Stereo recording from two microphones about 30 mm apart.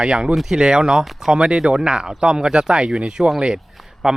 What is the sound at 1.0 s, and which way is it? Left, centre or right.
Speech, centre.